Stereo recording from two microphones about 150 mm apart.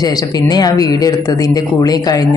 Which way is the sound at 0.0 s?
25° left (ahead or behind).